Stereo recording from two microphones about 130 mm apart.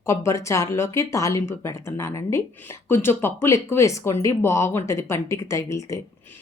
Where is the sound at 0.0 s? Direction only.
25° left (ahead or behind).